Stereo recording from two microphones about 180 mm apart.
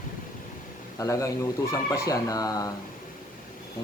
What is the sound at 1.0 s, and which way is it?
A man's voice, 15° left (ahead or behind).